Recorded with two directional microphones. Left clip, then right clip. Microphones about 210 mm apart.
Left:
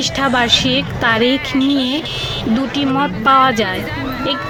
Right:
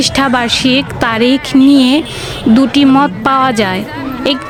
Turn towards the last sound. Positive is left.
turn(degrees=-50)  # may be behind; listen again after turning